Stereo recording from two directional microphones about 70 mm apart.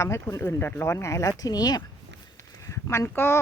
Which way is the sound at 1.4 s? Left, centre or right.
Left.